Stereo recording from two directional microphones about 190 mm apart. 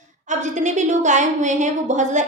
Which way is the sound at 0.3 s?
40° right (ahead or behind).